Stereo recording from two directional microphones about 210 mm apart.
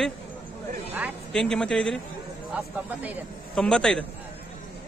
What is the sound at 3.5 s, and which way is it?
Speech, 5° left (ahead or behind).